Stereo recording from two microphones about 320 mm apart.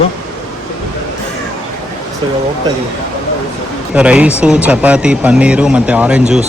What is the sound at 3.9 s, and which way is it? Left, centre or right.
A man's voice, centre.